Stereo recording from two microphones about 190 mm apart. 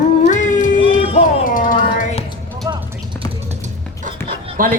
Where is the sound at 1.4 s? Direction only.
45° left (ahead or behind).